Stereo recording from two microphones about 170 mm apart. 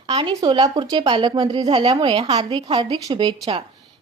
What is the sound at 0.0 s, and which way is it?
A woman's voice, 30° right (ahead or behind).